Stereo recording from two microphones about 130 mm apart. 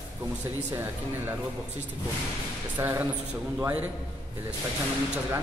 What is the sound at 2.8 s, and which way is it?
Speech, 25° right (ahead or behind).